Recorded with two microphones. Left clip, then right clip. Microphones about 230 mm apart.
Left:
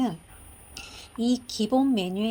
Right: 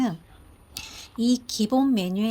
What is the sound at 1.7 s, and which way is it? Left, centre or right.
Speech, right.